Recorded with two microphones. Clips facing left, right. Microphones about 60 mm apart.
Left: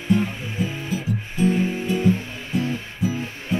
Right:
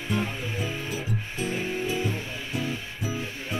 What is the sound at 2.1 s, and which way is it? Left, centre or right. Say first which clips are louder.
Music: left 5 dB; left.